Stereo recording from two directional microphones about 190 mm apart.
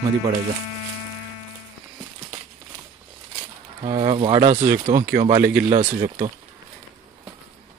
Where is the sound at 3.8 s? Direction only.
35° right (ahead or behind).